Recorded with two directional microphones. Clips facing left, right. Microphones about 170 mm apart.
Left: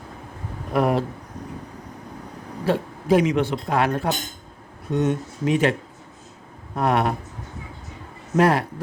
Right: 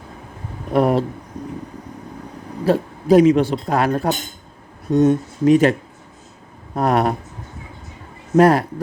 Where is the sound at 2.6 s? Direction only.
40° right (ahead or behind).